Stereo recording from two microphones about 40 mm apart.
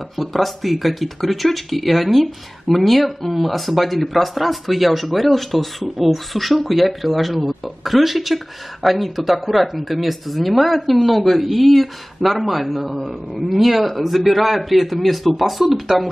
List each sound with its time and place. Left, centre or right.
0.2 s speech: centre